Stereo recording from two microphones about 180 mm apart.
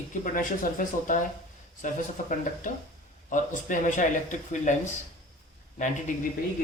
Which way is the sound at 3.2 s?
45° left (ahead or behind).